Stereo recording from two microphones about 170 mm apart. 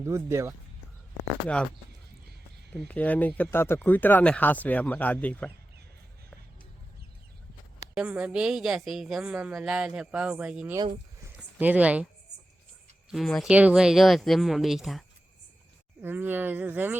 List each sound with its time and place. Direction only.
0.0 s speech: 15° right (ahead or behind)
2.7 s speech: 5° left (ahead or behind)
7.9 s a woman's voice: 10° right (ahead or behind)
13.1 s a woman's voice: centre (ahead or behind)